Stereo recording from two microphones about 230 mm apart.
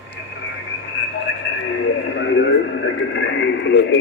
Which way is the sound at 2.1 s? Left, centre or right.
Left.